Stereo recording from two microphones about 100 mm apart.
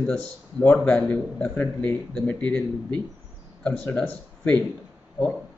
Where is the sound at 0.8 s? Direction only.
10° left (ahead or behind).